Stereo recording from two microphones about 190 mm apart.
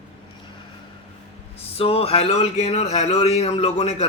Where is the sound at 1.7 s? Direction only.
30° left (ahead or behind).